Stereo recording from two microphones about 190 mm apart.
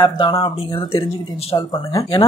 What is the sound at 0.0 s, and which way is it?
A man's voice, 25° left (ahead or behind).